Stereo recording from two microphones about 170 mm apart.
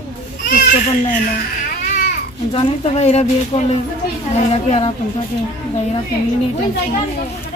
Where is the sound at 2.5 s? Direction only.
35° left (ahead or behind).